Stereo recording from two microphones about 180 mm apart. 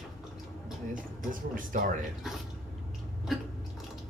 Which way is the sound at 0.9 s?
50° right (ahead or behind).